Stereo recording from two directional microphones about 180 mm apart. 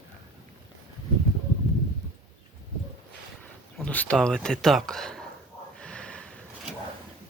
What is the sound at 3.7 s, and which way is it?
Speech, 10° left (ahead or behind).